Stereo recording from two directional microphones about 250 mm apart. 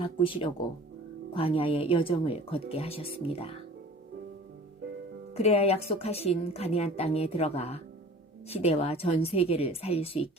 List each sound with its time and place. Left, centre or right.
0.0 s a woman's voice: left
5.3 s a woman's voice: left